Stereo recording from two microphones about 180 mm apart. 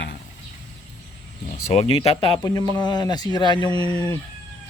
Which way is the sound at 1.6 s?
35° left (ahead or behind).